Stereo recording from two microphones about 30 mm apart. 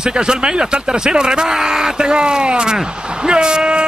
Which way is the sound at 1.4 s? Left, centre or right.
Centre.